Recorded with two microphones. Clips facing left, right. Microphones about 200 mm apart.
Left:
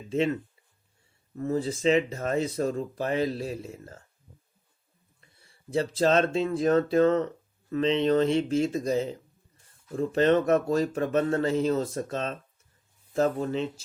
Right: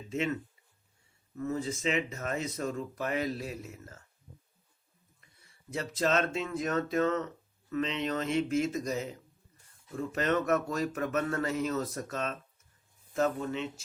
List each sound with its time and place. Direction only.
0.1 s speech: 30° left (ahead or behind)
1.4 s speech: 35° left (ahead or behind)
5.2 s speech: 30° left (ahead or behind)